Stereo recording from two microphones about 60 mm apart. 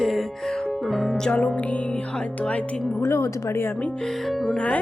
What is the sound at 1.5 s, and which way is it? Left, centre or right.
Speech, left.